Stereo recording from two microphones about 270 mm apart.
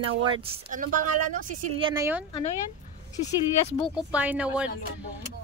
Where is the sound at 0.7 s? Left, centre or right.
Right.